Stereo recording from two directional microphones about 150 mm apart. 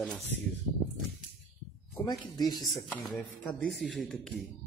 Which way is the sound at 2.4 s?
25° left (ahead or behind).